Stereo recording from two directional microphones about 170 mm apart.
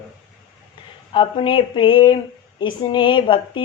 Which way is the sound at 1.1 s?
30° left (ahead or behind).